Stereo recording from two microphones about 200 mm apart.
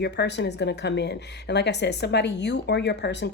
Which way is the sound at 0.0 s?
55° left (ahead or behind).